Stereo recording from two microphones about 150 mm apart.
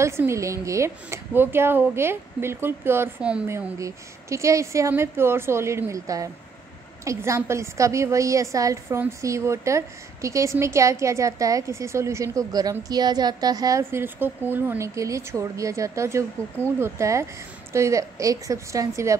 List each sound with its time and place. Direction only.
0.0 s a woman's voice: 20° right (ahead or behind)
3.4 s a woman's voice: 20° right (ahead or behind)